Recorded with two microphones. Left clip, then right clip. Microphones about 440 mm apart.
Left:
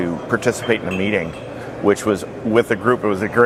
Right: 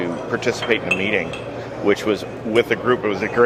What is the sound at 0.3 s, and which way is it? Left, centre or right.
Speech, left.